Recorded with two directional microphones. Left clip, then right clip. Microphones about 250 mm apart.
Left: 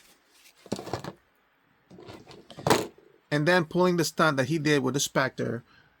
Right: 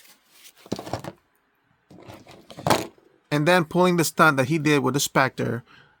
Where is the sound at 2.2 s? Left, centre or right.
Centre.